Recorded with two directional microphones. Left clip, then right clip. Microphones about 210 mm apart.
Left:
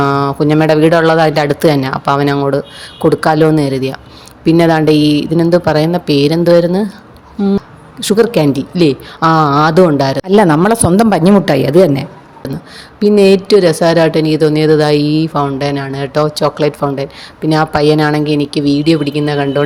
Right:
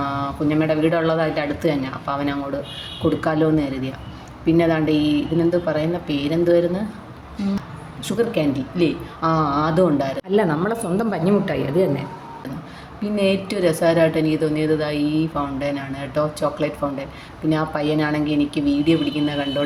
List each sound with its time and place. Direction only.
0.0 s speech: 50° left (ahead or behind)
8.0 s speech: 50° left (ahead or behind)